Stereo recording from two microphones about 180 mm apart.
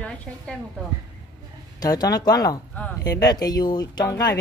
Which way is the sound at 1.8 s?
20° left (ahead or behind).